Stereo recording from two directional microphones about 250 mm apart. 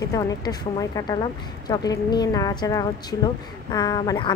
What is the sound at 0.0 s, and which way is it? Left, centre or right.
Speech, centre.